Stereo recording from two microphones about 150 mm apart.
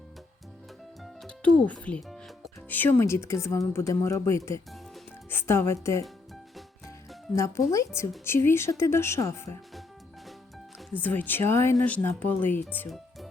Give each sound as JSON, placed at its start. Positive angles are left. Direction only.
{"t": 1.0, "sound": "music", "side_deg": 5}
{"t": 2.6, "sound": "speech", "side_deg": 10}
{"t": 7.3, "sound": "speech", "side_deg": 20}
{"t": 10.9, "sound": "speech", "side_deg": 10}